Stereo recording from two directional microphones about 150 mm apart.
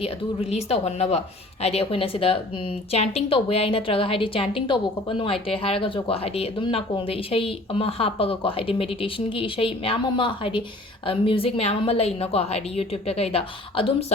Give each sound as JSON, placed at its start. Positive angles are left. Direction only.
{"t": 0.5, "sound": "a woman's voice", "side_deg": 45}